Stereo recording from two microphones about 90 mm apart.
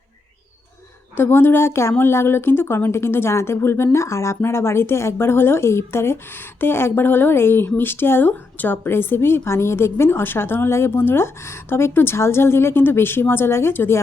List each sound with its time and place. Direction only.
1.1 s a woman's voice: 25° left (ahead or behind)